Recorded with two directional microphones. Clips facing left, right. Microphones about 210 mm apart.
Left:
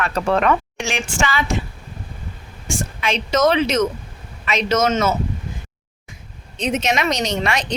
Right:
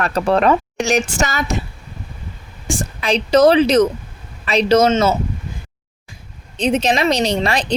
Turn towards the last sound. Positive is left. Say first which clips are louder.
# right 4 dB
turn(degrees=-30)  # may be behind; listen again after turning